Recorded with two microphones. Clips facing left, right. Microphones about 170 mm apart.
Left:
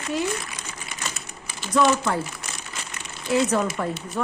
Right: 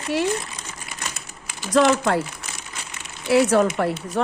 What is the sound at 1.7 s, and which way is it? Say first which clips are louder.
Speech: right 3 dB; 85° right.